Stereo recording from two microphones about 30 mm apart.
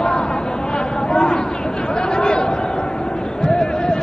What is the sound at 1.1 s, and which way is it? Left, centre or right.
Chatter, left.